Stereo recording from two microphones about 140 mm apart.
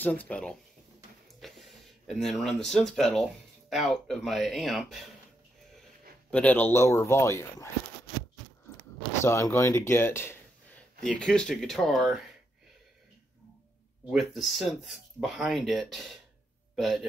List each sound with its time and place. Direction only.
0.0 s speech: 10° left (ahead or behind)
6.3 s speech: 10° left (ahead or behind)
9.2 s speech: 20° left (ahead or behind)
11.0 s speech: 5° left (ahead or behind)
14.1 s a man's voice: centre (ahead or behind)